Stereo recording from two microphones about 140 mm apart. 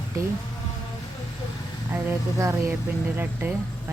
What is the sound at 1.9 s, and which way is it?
Speech, 15° right (ahead or behind).